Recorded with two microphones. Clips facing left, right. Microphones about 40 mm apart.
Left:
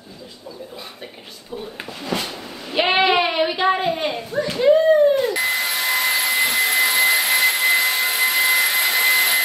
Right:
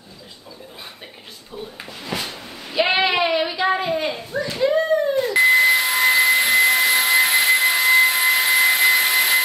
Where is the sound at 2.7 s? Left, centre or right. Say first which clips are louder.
Left 2 dB; left.